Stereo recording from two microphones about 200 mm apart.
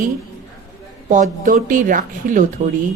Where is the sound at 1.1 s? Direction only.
40° right (ahead or behind).